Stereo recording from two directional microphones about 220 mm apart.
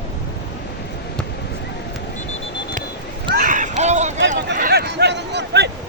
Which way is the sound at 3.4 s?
35° right (ahead or behind).